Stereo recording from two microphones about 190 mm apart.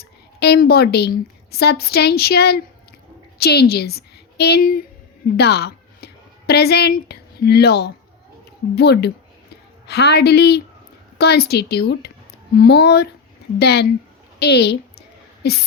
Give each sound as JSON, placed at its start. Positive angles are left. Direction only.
{"t": 0.0, "sound": "a woman's voice", "side_deg": 60}